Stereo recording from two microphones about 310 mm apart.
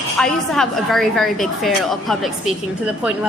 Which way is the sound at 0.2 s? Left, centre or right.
Centre.